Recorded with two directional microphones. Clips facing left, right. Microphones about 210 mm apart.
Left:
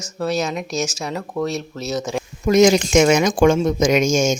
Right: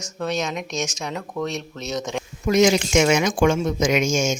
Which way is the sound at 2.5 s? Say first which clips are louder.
Left 4 dB; 40° left (ahead or behind).